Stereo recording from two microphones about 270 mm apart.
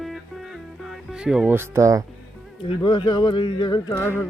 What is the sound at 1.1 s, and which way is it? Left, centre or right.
Speech, centre.